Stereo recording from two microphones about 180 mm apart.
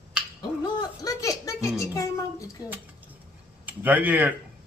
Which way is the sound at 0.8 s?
20° left (ahead or behind).